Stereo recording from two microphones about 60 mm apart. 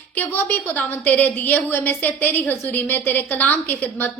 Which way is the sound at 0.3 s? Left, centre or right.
Left.